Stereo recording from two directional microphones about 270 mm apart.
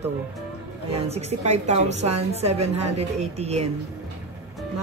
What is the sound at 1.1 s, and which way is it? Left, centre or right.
A woman's voice, right.